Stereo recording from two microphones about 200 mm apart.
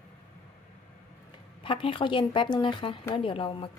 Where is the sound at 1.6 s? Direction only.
25° left (ahead or behind).